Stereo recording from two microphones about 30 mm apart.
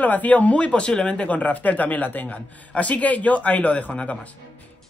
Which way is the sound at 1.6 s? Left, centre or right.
Left.